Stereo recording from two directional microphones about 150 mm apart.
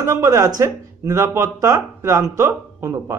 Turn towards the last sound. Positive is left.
turn(degrees=-20)  # may be behind; listen again after turning